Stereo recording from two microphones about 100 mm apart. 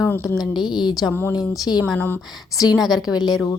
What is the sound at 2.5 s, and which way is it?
Speech, 40° left (ahead or behind).